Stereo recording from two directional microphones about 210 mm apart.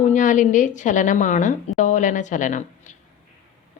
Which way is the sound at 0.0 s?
35° left (ahead or behind).